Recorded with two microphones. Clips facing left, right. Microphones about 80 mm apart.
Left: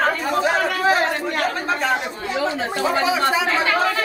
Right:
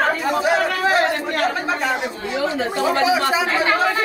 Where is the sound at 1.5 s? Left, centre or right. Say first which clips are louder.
Even; centre.